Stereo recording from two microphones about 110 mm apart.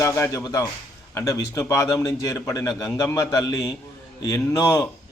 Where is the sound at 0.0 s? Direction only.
25° left (ahead or behind).